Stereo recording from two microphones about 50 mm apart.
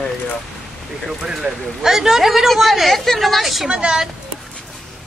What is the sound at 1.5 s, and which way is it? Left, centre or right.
Speech, right.